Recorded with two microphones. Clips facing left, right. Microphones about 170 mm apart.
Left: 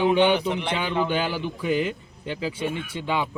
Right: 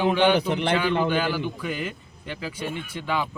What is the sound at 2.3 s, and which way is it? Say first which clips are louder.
Speech: left 4 dB; 30° left (ahead or behind).